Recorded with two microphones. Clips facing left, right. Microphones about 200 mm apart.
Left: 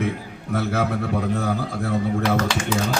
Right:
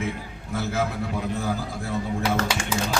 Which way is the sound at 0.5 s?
70° left (ahead or behind).